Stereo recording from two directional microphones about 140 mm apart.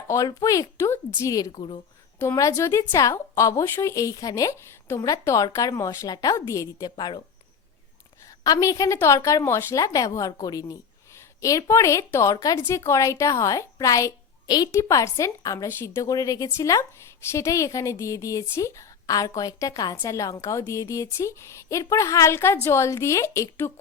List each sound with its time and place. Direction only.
0.1 s a woman's voice: 25° left (ahead or behind)
6.9 s speech: 35° left (ahead or behind)
8.4 s a woman's voice: 25° left (ahead or behind)